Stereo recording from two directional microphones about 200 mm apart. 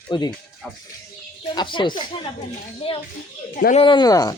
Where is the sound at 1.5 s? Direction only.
25° left (ahead or behind).